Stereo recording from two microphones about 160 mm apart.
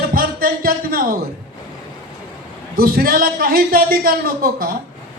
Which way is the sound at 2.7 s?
70° right (ahead or behind).